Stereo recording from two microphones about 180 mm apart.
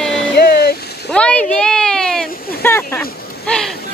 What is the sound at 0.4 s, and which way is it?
Vehicle, 60° left (ahead or behind).